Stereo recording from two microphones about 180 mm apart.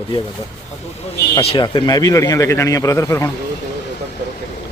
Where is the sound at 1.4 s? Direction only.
30° left (ahead or behind).